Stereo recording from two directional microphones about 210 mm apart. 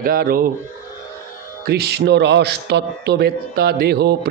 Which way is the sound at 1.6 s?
50° right (ahead or behind).